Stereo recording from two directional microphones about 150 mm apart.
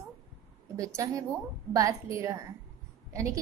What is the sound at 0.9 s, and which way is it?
A woman's voice, 20° right (ahead or behind).